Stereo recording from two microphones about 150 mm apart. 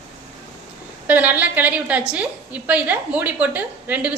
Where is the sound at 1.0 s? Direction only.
10° right (ahead or behind).